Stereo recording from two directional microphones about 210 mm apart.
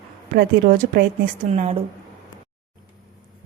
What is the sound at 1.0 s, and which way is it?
Speech, 35° right (ahead or behind).